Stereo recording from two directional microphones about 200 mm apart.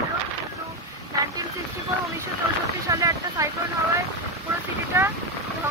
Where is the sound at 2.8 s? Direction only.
15° right (ahead or behind).